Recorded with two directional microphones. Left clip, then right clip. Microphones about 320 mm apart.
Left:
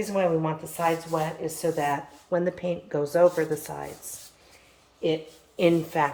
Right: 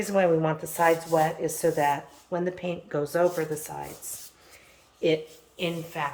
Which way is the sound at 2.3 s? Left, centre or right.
Centre.